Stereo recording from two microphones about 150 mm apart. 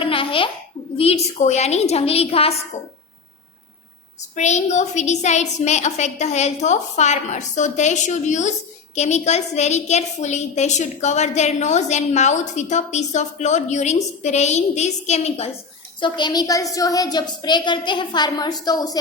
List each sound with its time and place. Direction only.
0.0 s a sound: 35° left (ahead or behind)
0.9 s a woman's voice: 45° left (ahead or behind)
4.4 s a woman's voice: 50° left (ahead or behind)
16.0 s a woman's voice: 30° left (ahead or behind)